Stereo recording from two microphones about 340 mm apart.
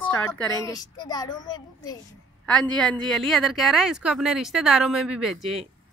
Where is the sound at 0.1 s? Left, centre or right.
Centre.